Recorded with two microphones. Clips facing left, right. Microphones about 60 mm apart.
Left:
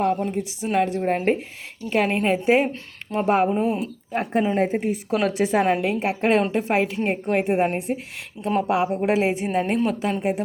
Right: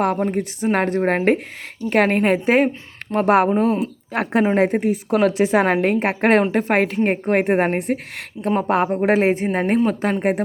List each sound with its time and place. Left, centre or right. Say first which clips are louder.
0.0 s a woman's voice: right 3 dB; right
1.9 s speech: right 4 dB; right
3.1 s a woman's voice: right 4 dB; right
4.1 s a woman's voice: right 4 dB; right
5.4 s a woman's voice: right 3 dB; right
5.7 s speech: right 4 dB; right
8.4 s speech: right 3 dB; right